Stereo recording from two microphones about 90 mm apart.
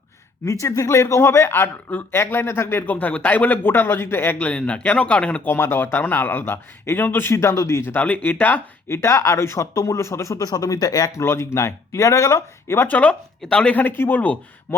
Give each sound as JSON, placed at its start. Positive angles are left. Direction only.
{"t": 0.4, "sound": "speech", "side_deg": 35}
{"t": 4.4, "sound": "speech", "side_deg": 15}
{"t": 5.5, "sound": "speech", "side_deg": 25}
{"t": 11.2, "sound": "speech", "side_deg": 30}
{"t": 13.7, "sound": "speech", "side_deg": 20}